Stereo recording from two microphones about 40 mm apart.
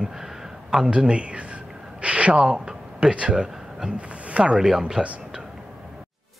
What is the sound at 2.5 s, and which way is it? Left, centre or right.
Speech, right.